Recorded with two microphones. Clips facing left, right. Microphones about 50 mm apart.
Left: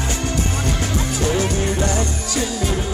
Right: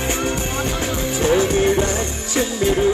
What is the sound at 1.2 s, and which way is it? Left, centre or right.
Music, right.